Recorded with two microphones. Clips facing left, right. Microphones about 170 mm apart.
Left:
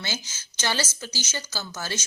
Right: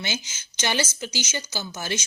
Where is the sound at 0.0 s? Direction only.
20° right (ahead or behind).